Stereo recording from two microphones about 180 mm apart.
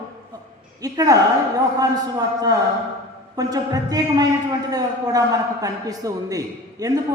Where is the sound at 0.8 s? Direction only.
20° right (ahead or behind).